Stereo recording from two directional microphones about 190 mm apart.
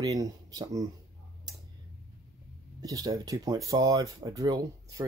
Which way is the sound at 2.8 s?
20° right (ahead or behind).